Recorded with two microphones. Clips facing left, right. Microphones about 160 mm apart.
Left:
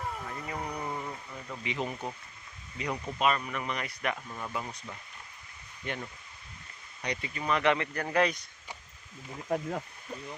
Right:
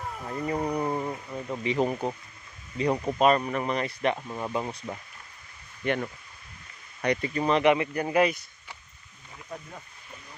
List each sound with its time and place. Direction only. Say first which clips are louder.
0.0 s music: even; centre (ahead or behind)
0.3 s a sound: right 8 dB; 30° right (ahead or behind)
2.7 s speech: right 9 dB; 30° right (ahead or behind)
5.8 s speech: right 10 dB; 65° right (ahead or behind)
7.0 s speech: right 9 dB; 50° right (ahead or behind)
7.6 s speech: right 5 dB; 15° right (ahead or behind)